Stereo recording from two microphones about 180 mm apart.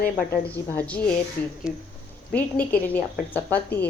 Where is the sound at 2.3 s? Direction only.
5° left (ahead or behind).